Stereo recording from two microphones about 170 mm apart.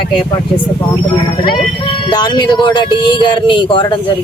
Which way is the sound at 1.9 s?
25° left (ahead or behind).